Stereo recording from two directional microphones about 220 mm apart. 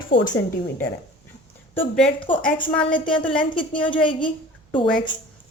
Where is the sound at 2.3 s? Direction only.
25° left (ahead or behind).